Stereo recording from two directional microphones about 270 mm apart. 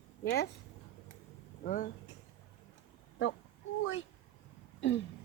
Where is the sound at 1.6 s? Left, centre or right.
Left.